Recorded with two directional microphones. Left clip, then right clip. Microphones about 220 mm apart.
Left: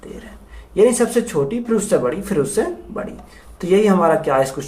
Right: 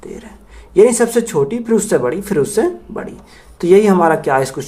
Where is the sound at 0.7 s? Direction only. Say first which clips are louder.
Right 4 dB; 40° right (ahead or behind).